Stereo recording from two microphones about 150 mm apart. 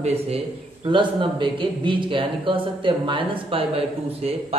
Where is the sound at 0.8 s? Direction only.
35° right (ahead or behind).